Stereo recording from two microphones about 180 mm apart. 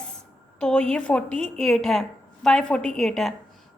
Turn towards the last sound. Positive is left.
turn(degrees=0)  # may be behind; listen again after turning